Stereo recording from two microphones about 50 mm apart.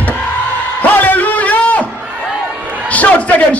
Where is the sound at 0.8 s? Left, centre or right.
Left.